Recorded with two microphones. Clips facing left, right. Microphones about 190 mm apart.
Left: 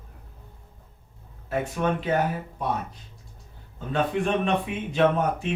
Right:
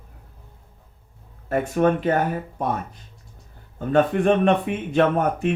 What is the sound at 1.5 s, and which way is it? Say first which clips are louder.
Speech: right 6 dB; 50° right (ahead or behind).